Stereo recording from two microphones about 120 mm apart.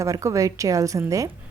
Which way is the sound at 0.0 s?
25° right (ahead or behind).